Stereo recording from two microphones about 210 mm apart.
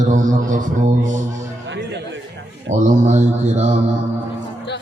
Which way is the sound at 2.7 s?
35° right (ahead or behind).